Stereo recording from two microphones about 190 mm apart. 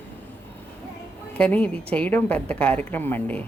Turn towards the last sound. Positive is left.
turn(degrees=10)  # may be behind; listen again after turning